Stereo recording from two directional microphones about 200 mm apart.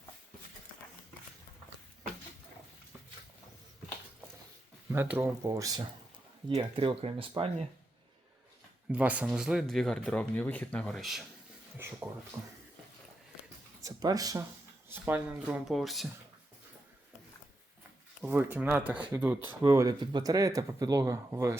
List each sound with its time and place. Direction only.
4.9 s speech: 10° right (ahead or behind); by 7.5 s 30° right (ahead or behind)
8.9 s speech: 5° right (ahead or behind)
13.8 s speech: 20° right (ahead or behind); by 16.0 s centre (ahead or behind)
18.2 s speech: 10° right (ahead or behind)